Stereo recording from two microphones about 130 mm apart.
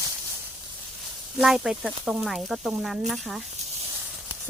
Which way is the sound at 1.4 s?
5° right (ahead or behind).